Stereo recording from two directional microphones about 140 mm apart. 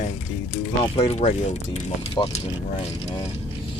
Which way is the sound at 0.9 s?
45° left (ahead or behind).